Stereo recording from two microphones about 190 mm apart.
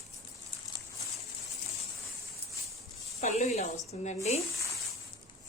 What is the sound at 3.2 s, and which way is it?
A woman's voice, 35° left (ahead or behind).